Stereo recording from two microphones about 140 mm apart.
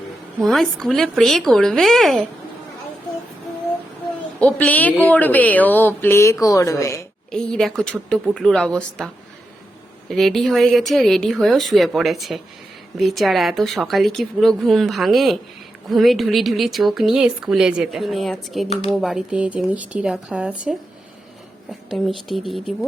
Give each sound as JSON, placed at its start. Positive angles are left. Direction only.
{"t": 0.4, "sound": "speech", "side_deg": 0}
{"t": 4.4, "sound": "speech", "side_deg": 10}
{"t": 7.3, "sound": "speech", "side_deg": 5}
{"t": 10.1, "sound": "speech", "side_deg": 0}